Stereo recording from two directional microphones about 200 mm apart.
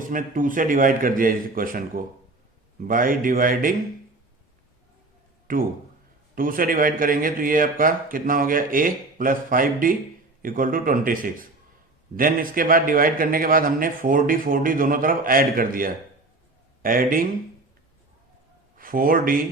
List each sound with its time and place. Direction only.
0.1 s a man's voice: 40° right (ahead or behind)
5.5 s a man's voice: 45° right (ahead or behind)
18.8 s speech: 45° right (ahead or behind)